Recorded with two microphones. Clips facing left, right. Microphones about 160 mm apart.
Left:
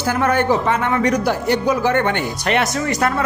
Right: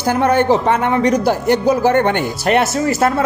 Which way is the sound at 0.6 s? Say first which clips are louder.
Right 3 dB; 55° right (ahead or behind).